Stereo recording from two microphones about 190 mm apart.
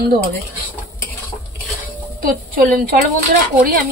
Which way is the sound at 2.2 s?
50° right (ahead or behind).